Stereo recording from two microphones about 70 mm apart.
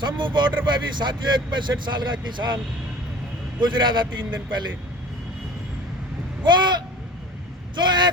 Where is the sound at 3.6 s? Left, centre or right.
Right.